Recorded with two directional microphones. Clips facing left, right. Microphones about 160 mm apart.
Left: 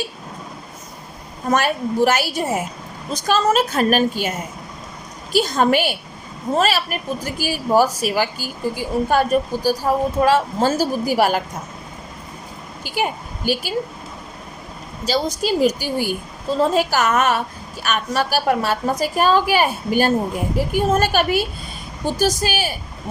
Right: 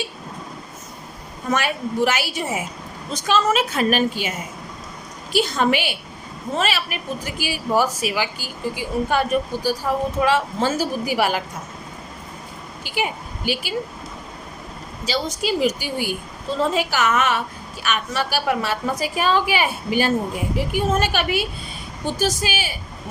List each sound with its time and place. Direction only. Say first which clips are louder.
1.5 s a woman's voice: left 4 dB; 40° left (ahead or behind)
12.8 s a woman's voice: left 3 dB; 45° left (ahead or behind)
15.0 s a woman's voice: left 3 dB; 45° left (ahead or behind)